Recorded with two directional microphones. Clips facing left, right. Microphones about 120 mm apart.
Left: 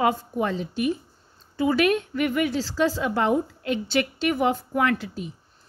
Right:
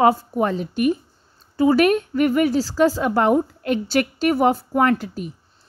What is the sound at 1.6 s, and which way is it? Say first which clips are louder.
A woman's voice: right 5 dB; 40° right (ahead or behind).